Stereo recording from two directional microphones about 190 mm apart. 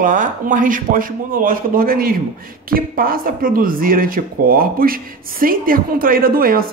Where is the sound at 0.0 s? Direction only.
45° right (ahead or behind).